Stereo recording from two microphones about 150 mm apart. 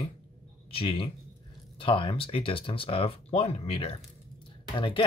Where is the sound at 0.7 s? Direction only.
40° left (ahead or behind).